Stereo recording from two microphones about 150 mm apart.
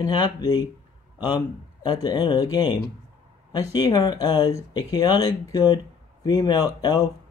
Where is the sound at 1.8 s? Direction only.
25° left (ahead or behind).